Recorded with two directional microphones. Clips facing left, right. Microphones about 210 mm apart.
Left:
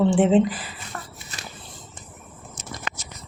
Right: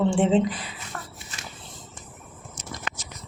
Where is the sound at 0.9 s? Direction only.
5° left (ahead or behind).